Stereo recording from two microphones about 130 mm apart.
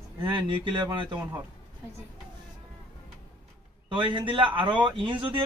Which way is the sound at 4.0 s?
40° right (ahead or behind).